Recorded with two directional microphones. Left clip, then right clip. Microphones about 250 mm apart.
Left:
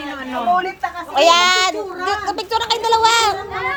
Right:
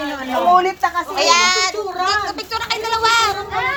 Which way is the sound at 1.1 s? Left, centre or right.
Left.